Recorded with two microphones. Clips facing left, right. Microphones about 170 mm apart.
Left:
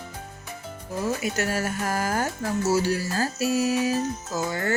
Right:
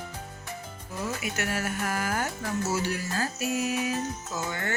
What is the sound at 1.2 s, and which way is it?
Music, 40° left (ahead or behind).